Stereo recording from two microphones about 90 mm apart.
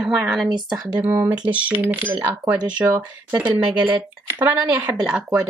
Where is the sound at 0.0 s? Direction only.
5° right (ahead or behind).